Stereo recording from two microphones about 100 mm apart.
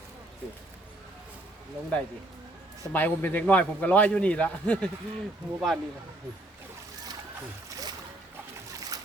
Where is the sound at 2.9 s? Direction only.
15° left (ahead or behind).